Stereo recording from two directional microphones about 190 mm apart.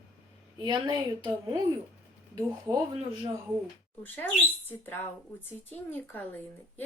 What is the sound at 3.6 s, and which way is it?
Speech, 10° left (ahead or behind).